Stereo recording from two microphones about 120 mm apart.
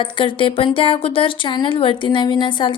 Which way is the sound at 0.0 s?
45° left (ahead or behind).